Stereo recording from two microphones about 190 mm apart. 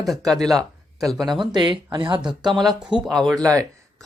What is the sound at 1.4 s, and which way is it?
Speech, 25° right (ahead or behind).